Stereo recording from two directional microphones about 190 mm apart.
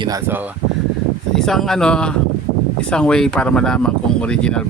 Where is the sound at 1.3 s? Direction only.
Centre (ahead or behind).